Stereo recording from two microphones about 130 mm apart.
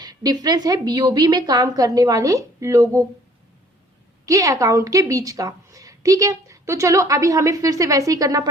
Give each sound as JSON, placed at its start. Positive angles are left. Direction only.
{"t": 0.0, "sound": "a woman's voice", "side_deg": -30}
{"t": 4.3, "sound": "a woman's voice", "side_deg": -25}